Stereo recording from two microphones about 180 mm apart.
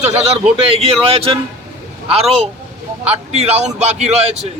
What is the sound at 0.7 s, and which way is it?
A man's voice, 30° right (ahead or behind).